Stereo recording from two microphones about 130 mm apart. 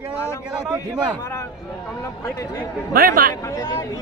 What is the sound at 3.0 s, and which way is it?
Speech, 90° right.